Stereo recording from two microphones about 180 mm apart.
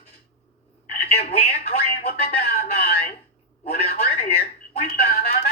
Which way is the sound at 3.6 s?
35° left (ahead or behind).